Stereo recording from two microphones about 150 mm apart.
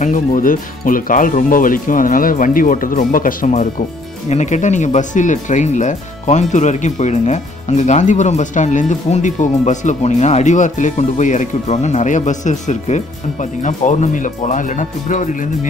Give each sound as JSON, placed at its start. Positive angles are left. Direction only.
{"t": 0.0, "sound": "speech", "side_deg": 60}
{"t": 4.3, "sound": "speech", "side_deg": 50}